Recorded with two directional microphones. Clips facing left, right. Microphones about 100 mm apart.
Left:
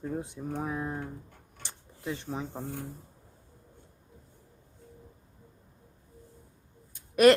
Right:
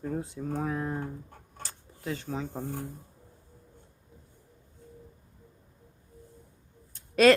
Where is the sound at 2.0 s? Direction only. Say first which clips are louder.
Right 1 dB; 15° left (ahead or behind).